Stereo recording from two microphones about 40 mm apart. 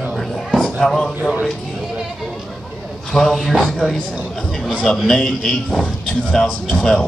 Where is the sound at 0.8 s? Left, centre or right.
Centre.